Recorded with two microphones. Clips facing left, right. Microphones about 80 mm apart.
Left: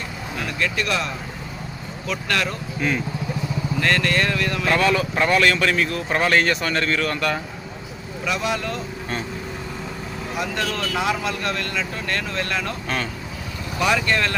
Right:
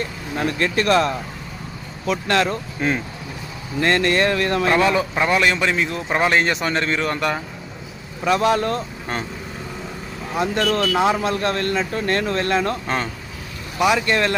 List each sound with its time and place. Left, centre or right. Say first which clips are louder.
0.3 s speech: right 5 dB; right
2.0 s a man's voice: right 5 dB; right
8.2 s speech: right 7 dB; right
10.3 s a man's voice: right 6 dB; right
10.6 s speech: right 8 dB; right
10.9 s speech: right 5 dB; right
13.7 s a man's voice: right 3 dB; centre